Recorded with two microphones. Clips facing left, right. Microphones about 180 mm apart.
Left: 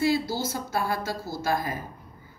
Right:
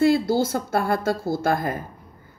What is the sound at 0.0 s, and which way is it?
A woman's voice, 55° right (ahead or behind).